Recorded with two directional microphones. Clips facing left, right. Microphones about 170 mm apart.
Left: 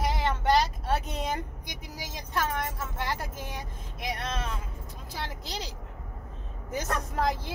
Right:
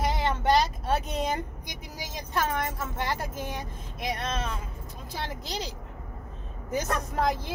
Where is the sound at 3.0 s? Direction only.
20° right (ahead or behind).